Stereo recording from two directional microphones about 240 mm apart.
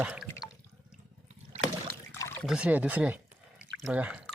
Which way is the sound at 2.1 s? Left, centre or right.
Centre.